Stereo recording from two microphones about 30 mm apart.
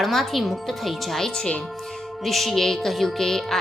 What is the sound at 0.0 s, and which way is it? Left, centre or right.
Speech, centre.